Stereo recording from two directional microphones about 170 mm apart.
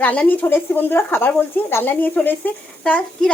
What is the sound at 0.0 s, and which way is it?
Speech, 10° left (ahead or behind).